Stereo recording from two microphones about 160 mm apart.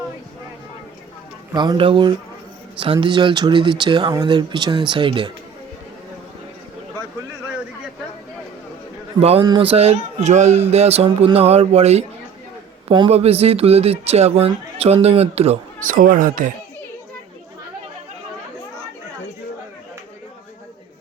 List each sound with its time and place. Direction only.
1.5 s speech: 30° right (ahead or behind)
9.4 s speech: 25° right (ahead or behind)
9.6 s speech: 40° right (ahead or behind)
15.9 s speech: 60° right (ahead or behind)